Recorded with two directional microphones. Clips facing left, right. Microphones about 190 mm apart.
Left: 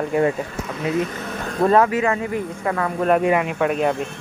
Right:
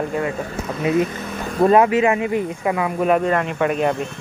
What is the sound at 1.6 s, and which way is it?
Speech, 15° right (ahead or behind).